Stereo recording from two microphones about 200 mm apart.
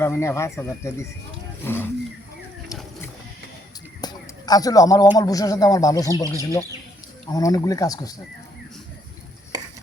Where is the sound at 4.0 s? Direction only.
20° left (ahead or behind).